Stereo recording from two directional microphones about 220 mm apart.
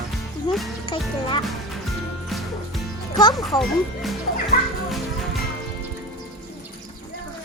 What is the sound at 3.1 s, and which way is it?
Speech, 20° left (ahead or behind).